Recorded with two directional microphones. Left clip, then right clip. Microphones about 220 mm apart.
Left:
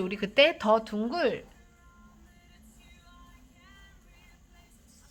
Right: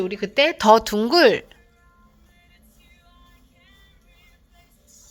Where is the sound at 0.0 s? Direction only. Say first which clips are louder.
Right 3 dB; 20° right (ahead or behind).